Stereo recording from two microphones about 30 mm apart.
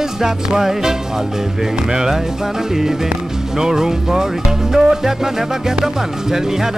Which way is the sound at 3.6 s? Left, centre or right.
Centre.